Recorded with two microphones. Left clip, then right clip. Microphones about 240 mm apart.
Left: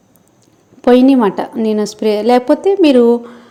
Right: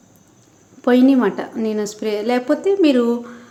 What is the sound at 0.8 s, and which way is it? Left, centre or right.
A woman's voice, centre.